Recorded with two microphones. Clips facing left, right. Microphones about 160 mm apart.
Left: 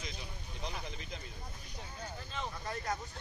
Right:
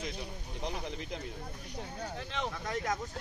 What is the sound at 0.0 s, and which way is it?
Speech, 60° right (ahead or behind).